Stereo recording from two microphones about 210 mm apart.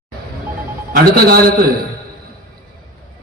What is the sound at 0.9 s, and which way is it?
Speech, 45° right (ahead or behind).